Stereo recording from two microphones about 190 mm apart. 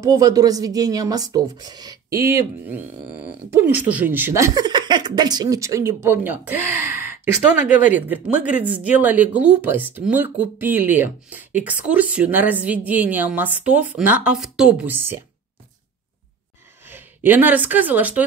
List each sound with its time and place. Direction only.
0.0 s speech: 15° right (ahead or behind)
16.8 s speech: 10° right (ahead or behind)